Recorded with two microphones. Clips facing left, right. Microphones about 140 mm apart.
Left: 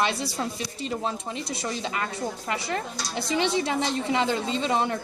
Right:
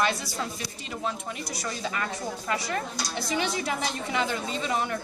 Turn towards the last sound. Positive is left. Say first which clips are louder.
# left 4 dB
turn(degrees=30)  # may be behind; listen again after turning